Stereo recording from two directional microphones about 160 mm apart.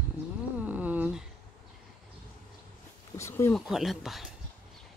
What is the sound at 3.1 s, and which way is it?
Speech, 15° left (ahead or behind).